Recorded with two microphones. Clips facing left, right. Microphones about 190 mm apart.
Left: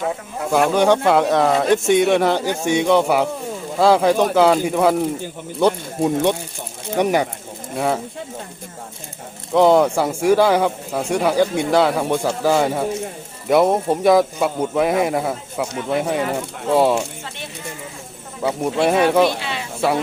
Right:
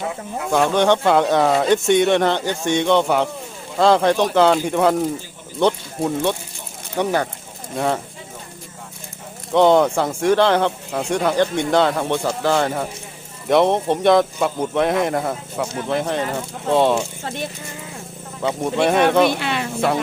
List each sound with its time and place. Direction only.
0.5 s speech: 5° left (ahead or behind)
9.5 s speech: 5° left (ahead or behind)
18.4 s speech: 5° left (ahead or behind)
19.3 s speech: 60° right (ahead or behind)